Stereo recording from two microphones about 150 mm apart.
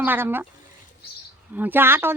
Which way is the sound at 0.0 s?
15° right (ahead or behind).